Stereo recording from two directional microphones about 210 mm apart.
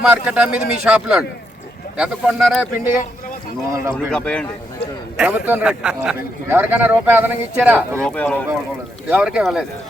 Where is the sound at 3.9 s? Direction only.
5° left (ahead or behind).